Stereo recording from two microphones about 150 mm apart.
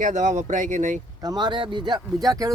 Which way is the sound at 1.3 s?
30° right (ahead or behind).